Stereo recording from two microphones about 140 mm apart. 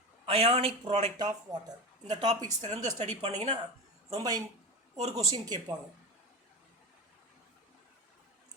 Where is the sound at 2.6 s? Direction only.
50° right (ahead or behind).